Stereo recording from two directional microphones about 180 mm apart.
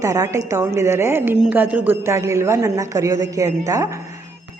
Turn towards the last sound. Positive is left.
turn(degrees=-20)  # may be behind; listen again after turning